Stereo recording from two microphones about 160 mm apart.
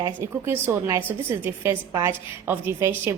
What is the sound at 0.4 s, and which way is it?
A woman's voice, 15° right (ahead or behind).